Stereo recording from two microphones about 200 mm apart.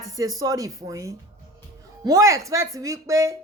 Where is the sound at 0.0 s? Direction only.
15° right (ahead or behind).